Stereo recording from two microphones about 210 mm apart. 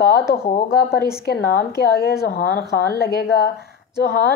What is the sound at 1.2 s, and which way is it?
Speech, 50° left (ahead or behind).